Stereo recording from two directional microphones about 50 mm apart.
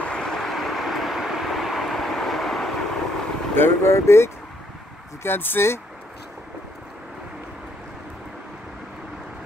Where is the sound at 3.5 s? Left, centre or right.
Left.